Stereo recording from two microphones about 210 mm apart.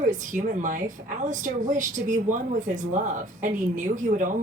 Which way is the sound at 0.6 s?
40° right (ahead or behind).